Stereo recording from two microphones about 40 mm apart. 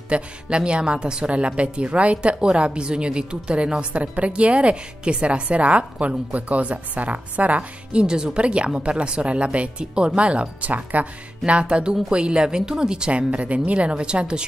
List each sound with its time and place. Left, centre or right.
0.1 s a woman's voice: right
7.9 s a woman's voice: right
13.3 s a woman's voice: right